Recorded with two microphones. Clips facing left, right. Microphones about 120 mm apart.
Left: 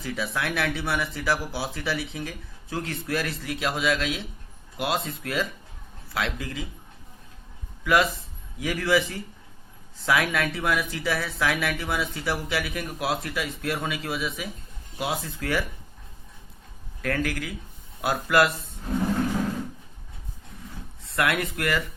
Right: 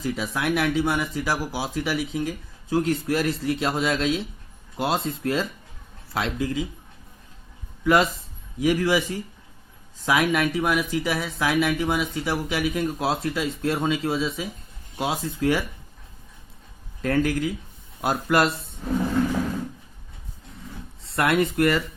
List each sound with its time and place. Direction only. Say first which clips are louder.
0.0 s speech: right 3 dB; 15° right (ahead or behind)
8.5 s speech: right 3 dB; 15° right (ahead or behind)
17.0 s speech: right 5 dB; 20° right (ahead or behind)
21.2 s speech: right 5 dB; 25° right (ahead or behind)